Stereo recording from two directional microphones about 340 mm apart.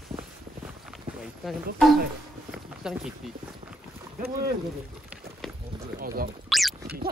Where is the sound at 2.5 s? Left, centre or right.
Centre.